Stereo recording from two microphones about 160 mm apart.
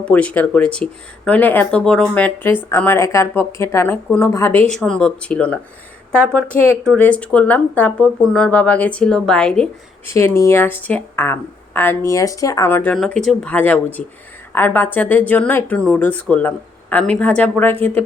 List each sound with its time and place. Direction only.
0.0 s a woman's voice: 10° left (ahead or behind)
10.1 s speech: 15° left (ahead or behind)